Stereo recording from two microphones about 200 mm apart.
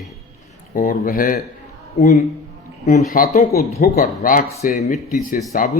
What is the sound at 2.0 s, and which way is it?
Speech, 35° left (ahead or behind).